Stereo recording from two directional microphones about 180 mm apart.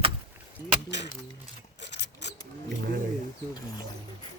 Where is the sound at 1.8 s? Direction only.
75° left (ahead or behind).